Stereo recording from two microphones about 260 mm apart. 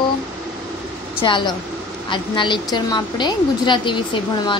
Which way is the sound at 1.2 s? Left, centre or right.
Centre.